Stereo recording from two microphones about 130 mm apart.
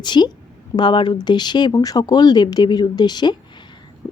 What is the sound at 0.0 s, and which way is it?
Speech, 35° left (ahead or behind).